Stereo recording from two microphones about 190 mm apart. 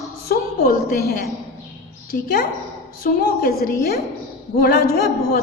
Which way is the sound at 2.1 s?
55° left (ahead or behind).